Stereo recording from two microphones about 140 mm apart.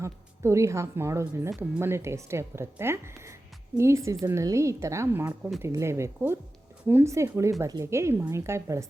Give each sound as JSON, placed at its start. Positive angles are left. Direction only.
{"t": 0.0, "sound": "a woman's voice", "side_deg": -20}